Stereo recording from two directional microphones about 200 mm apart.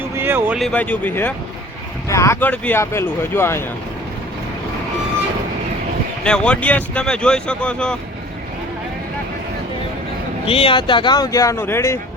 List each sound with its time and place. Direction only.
0.2 s a sound: 10° right (ahead or behind)
0.7 s speech: 5° left (ahead or behind)
6.2 s speech: 5° left (ahead or behind)
10.4 s speech: 25° left (ahead or behind)